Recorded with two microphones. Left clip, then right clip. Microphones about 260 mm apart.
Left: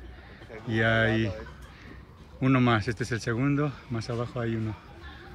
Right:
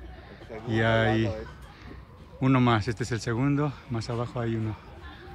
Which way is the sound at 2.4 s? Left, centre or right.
Centre.